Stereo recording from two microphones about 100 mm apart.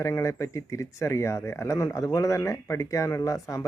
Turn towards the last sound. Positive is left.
turn(degrees=35)  # may be behind; listen again after turning